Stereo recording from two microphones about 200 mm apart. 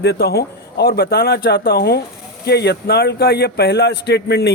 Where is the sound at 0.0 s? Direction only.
55° left (ahead or behind).